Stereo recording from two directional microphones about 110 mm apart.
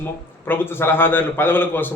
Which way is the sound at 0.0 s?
20° left (ahead or behind).